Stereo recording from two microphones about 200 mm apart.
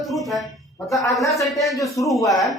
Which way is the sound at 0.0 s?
Centre (ahead or behind).